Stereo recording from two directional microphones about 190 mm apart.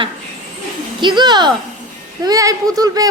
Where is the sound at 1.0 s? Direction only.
25° right (ahead or behind).